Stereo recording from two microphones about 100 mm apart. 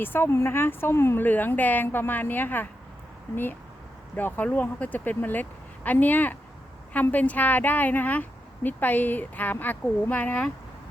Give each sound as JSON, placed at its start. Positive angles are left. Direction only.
{"t": 0.0, "sound": "a woman's voice", "side_deg": 20}
{"t": 4.1, "sound": "speech", "side_deg": 20}